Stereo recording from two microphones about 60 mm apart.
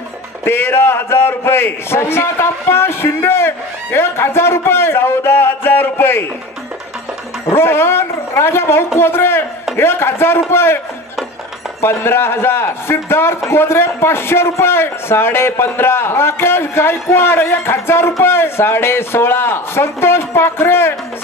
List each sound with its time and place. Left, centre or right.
0.5 s a man's voice: left
7.5 s a man's voice: left
11.8 s a man's voice: left